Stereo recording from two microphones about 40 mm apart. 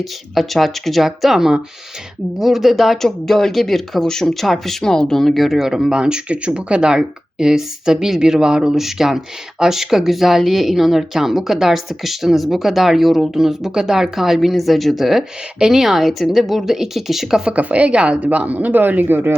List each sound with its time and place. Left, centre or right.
0.0 s speech: centre
5.6 s speech: centre
6.0 s speech: right; by 17.2 s centre
17.5 s speech: right